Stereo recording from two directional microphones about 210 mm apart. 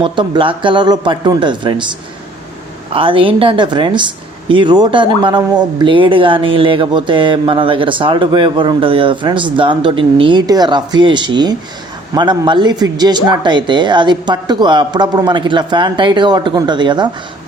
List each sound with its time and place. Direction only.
0.0 s speech: 25° right (ahead or behind)